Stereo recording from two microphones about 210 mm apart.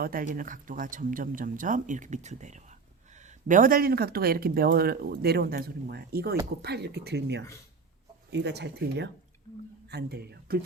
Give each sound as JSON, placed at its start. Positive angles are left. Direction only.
{"t": 0.0, "sound": "speech", "side_deg": -40}